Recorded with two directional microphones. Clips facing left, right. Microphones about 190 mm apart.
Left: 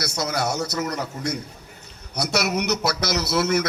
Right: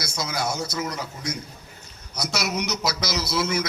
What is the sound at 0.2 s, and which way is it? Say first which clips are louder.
A man's voice: left 3 dB; 70° left (ahead or behind).